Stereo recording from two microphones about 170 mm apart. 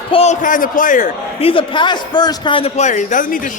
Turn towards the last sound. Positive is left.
turn(degrees=50)  # may be behind; listen again after turning